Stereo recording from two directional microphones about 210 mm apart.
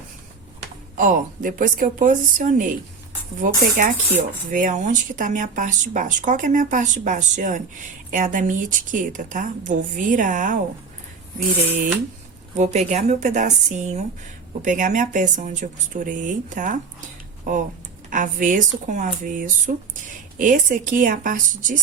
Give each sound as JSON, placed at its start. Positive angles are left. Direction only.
{"t": 0.9, "sound": "speech", "side_deg": -40}
{"t": 12.5, "sound": "speech", "side_deg": -35}